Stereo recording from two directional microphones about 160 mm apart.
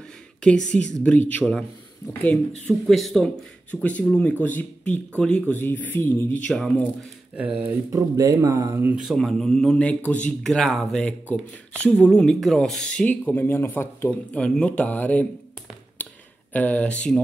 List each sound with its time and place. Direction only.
1.0 s a man's voice: 10° left (ahead or behind)
7.3 s speech: 10° right (ahead or behind)
9.0 s a man's voice: centre (ahead or behind)
16.0 s a sound: 10° left (ahead or behind)
16.5 s a man's voice: 10° left (ahead or behind)